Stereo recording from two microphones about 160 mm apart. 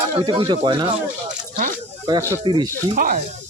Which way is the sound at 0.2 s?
30° right (ahead or behind).